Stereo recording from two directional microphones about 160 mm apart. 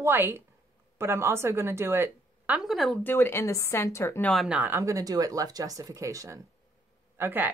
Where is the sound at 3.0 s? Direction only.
15° left (ahead or behind).